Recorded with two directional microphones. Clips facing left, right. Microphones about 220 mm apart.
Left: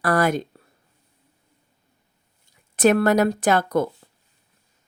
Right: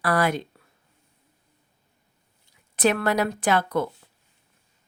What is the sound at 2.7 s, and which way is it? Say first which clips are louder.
A woman's voice: left 5 dB; 45° left (ahead or behind).